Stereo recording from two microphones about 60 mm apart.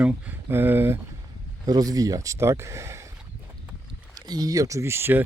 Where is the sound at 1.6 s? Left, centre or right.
Right.